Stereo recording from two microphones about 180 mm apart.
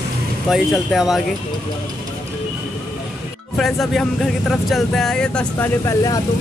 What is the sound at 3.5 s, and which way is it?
Speech, centre (ahead or behind).